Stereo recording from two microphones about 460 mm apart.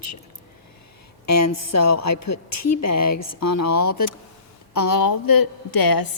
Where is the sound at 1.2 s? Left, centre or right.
Left.